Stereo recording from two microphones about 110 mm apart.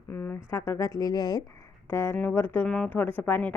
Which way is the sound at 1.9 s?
25° left (ahead or behind).